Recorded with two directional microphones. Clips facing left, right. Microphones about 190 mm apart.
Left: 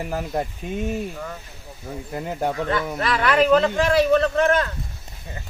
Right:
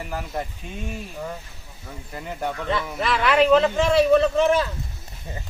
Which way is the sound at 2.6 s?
Centre (ahead or behind).